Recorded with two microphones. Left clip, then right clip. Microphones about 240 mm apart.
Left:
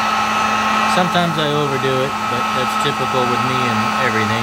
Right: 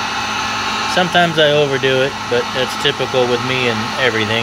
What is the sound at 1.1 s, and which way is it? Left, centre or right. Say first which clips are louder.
Speech: right 5 dB; centre.